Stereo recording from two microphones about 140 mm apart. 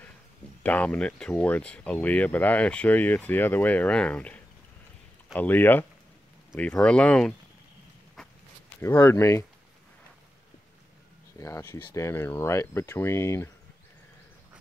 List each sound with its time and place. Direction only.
0.7 s speech: 10° left (ahead or behind)
8.6 s speech: 20° left (ahead or behind)
11.3 s speech: 20° left (ahead or behind)